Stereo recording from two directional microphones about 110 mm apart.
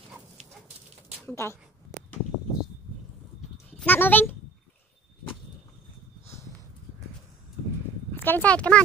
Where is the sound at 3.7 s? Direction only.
15° left (ahead or behind).